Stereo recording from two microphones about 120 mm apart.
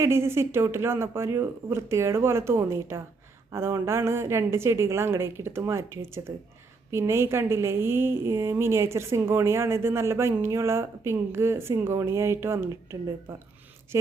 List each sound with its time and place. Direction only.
0.0 s a woman's voice: 20° right (ahead or behind)